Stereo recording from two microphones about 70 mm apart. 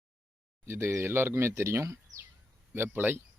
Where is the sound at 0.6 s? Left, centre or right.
Right.